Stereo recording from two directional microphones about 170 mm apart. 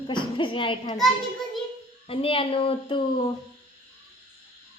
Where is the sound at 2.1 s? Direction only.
30° left (ahead or behind).